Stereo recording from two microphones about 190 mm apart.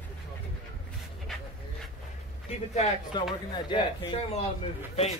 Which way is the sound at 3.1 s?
25° left (ahead or behind).